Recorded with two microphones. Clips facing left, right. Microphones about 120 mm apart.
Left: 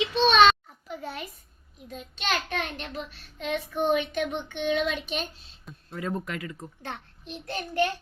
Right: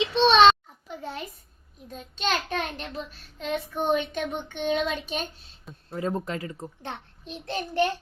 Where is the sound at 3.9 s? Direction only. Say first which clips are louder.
Even; 40° right (ahead or behind).